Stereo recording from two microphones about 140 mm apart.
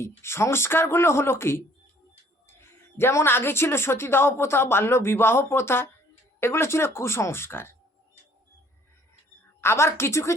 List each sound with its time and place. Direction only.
0.2 s speech: 20° left (ahead or behind)
9.6 s a woman's voice: 20° left (ahead or behind)